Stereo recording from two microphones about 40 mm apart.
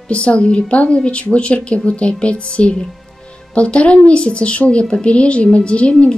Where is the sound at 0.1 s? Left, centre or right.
Left.